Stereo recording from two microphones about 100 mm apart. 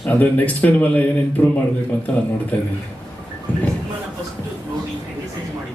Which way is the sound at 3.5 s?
15° left (ahead or behind).